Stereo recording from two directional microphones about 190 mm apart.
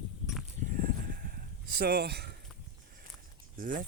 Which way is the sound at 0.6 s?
45° right (ahead or behind).